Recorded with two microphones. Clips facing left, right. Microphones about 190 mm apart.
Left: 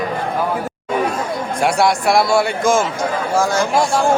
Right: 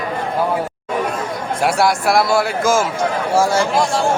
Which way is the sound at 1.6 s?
Centre (ahead or behind).